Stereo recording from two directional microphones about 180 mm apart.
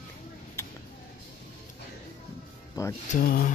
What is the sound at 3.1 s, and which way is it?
Speech, 55° left (ahead or behind).